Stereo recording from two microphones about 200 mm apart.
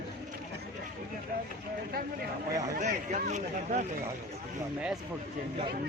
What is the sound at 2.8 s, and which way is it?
Speech, 35° right (ahead or behind).